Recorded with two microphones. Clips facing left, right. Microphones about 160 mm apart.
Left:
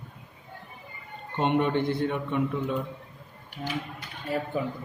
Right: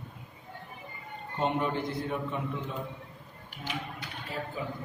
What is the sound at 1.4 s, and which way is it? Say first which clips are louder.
A man's voice: left 5 dB; 75° left (ahead or behind).